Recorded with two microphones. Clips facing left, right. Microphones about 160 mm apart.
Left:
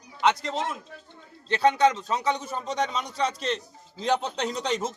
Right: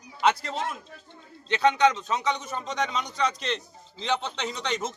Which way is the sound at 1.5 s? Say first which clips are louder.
Left 1 dB; 35° left (ahead or behind).